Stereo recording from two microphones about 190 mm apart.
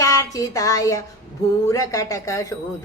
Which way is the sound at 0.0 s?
15° left (ahead or behind).